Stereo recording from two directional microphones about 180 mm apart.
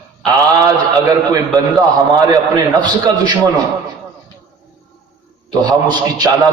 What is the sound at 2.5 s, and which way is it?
Speech, 25° right (ahead or behind).